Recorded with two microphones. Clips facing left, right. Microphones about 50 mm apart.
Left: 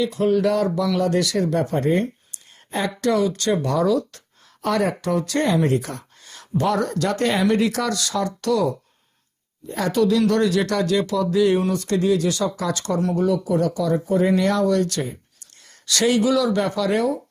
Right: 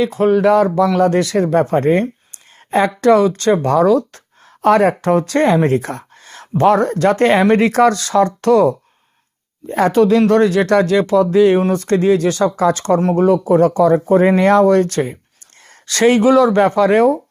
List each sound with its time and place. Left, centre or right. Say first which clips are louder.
0.0 s a woman's voice: right 6 dB; right